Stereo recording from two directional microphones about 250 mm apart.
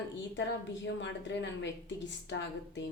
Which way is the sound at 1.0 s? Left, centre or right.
Left.